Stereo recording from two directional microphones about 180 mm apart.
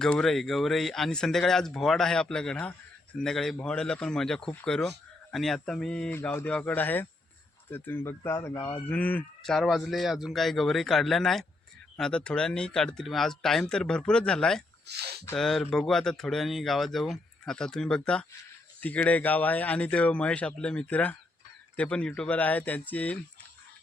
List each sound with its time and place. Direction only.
0.0 s speech: 5° left (ahead or behind)
14.8 s speech: 65° right (ahead or behind)
15.4 s speech: centre (ahead or behind)